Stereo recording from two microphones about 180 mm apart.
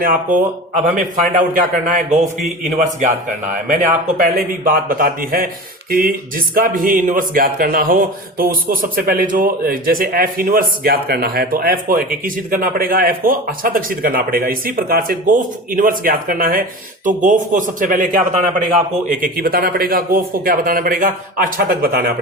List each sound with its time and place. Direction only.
0.0 s speech: 50° right (ahead or behind)